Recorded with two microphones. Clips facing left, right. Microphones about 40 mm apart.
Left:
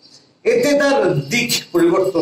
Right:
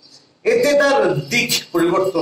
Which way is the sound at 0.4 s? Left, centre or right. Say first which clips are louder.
Even; centre.